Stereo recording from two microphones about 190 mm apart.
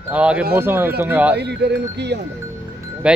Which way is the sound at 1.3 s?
60° right (ahead or behind).